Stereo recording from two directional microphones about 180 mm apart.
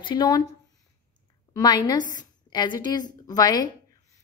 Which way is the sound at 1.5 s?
25° left (ahead or behind).